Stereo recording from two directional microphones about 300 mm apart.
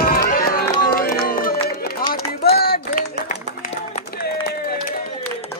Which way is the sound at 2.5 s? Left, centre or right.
Left.